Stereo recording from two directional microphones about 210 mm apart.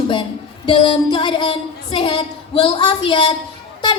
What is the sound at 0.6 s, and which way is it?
Child singing, 20° left (ahead or behind).